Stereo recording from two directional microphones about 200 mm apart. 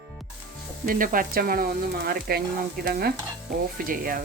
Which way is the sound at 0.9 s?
45° right (ahead or behind).